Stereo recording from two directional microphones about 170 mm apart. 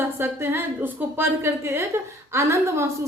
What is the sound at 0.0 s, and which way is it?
A woman's voice, 15° right (ahead or behind).